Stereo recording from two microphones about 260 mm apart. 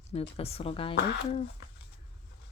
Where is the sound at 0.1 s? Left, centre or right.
Left.